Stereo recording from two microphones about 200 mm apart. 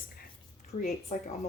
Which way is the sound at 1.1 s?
35° left (ahead or behind).